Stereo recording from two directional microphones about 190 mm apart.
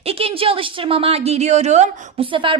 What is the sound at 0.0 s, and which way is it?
A woman's voice, 30° right (ahead or behind).